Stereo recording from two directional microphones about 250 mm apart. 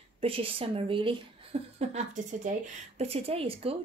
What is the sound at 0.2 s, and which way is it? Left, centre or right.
A woman's voice, right.